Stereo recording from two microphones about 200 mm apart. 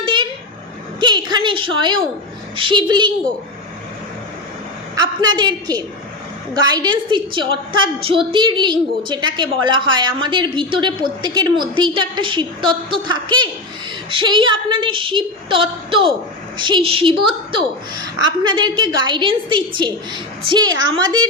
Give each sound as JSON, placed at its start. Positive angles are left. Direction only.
{"t": 0.0, "sound": "vehicle", "side_deg": -25}
{"t": 0.9, "sound": "a sound", "side_deg": -25}
{"t": 2.6, "sound": "a woman's voice", "side_deg": -25}
{"t": 4.9, "sound": "a woman's voice", "side_deg": -20}